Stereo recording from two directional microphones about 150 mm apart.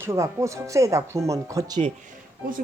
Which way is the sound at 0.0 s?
20° right (ahead or behind).